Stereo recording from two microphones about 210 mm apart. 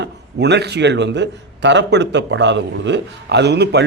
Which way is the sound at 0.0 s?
55° right (ahead or behind).